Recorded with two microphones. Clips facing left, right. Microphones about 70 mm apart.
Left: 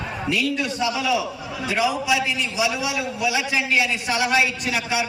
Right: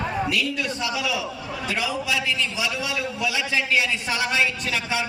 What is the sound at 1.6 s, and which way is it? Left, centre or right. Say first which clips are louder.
A man's voice: left 5 dB; centre.